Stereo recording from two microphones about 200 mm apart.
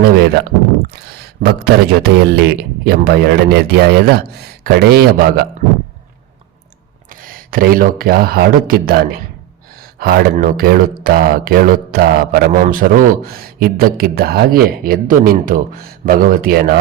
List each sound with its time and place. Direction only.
0.0 s speech: 50° right (ahead or behind)
7.1 s speech: 45° right (ahead or behind)